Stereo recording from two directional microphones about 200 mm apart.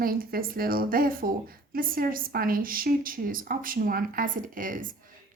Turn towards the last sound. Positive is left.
turn(degrees=-45)  # may be behind; listen again after turning